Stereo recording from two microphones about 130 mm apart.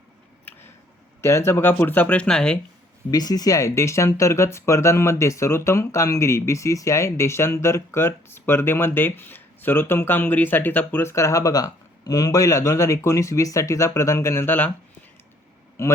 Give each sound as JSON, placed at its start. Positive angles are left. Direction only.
{"t": 0.4, "sound": "a sound", "side_deg": 15}
{"t": 1.2, "sound": "speech", "side_deg": 20}
{"t": 3.1, "sound": "speech", "side_deg": 30}
{"t": 15.8, "sound": "speech", "side_deg": 20}